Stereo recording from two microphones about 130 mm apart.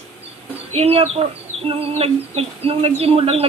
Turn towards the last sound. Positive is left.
turn(degrees=-50)  # may be behind; listen again after turning